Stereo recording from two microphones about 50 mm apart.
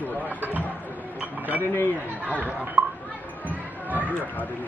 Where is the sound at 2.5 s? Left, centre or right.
Right.